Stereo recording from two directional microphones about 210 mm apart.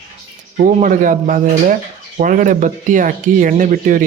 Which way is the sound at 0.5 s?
40° right (ahead or behind).